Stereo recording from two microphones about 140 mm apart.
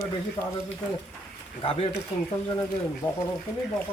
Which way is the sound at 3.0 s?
15° left (ahead or behind).